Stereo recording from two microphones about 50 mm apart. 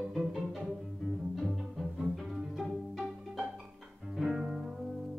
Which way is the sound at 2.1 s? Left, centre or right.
Centre.